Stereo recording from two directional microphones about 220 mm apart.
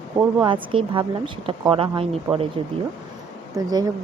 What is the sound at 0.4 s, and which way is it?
Speech, 25° right (ahead or behind).